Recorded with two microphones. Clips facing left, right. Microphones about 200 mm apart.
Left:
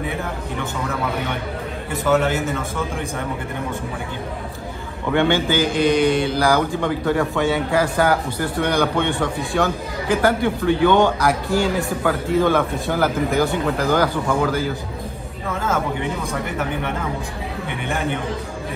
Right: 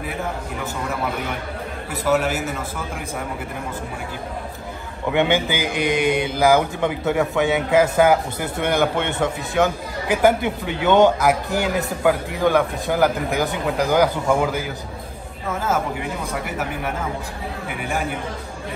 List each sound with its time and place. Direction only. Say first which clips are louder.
1.9 s speech: left 2 dB; 5° right (ahead or behind)
5.1 s a man's voice: left 2 dB; 15° right (ahead or behind)
16.4 s speech: left 2 dB; 5° right (ahead or behind)